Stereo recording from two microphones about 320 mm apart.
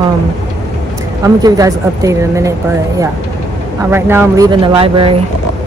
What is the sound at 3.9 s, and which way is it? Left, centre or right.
Speech, centre.